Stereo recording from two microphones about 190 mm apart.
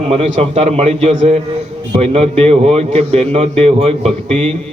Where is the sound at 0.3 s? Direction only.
35° right (ahead or behind).